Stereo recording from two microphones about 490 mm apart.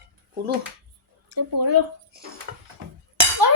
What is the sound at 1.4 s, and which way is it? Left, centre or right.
Speech, right.